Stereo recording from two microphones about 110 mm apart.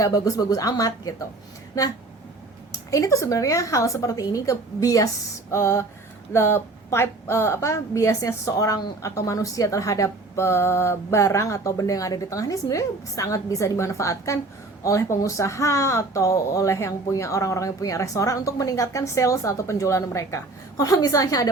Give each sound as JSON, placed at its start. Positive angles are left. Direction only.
{"t": 0.0, "sound": "speech", "side_deg": 30}
{"t": 2.9, "sound": "a woman's voice", "side_deg": 30}